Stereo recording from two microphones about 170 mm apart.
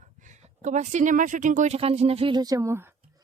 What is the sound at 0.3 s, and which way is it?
Speech, 45° right (ahead or behind).